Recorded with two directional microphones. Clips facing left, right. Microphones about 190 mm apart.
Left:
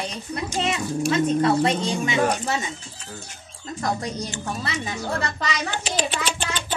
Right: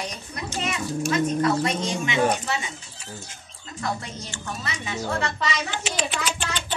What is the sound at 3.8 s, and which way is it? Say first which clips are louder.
A woman's voice: left 4 dB; 40° left (ahead or behind).